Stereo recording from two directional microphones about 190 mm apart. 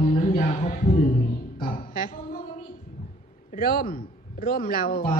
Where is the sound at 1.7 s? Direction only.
50° left (ahead or behind).